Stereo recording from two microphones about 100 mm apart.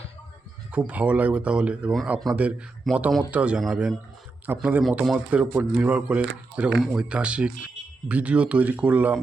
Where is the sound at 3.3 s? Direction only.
10° right (ahead or behind).